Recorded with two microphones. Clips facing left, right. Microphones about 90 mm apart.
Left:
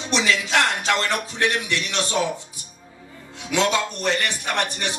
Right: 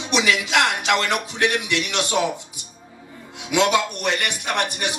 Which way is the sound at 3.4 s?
15° right (ahead or behind).